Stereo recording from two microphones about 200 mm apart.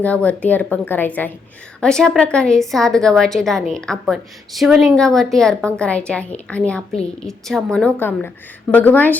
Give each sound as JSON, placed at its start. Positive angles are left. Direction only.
{"t": 0.0, "sound": "a woman's voice", "side_deg": 5}